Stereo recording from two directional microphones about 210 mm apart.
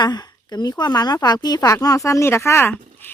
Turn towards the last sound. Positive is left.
turn(degrees=10)  # may be behind; listen again after turning